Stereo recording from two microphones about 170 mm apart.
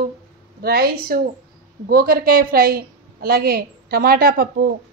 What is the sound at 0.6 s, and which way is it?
A woman's voice, 65° right (ahead or behind).